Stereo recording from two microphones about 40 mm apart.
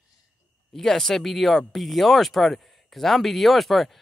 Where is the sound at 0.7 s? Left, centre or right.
Centre.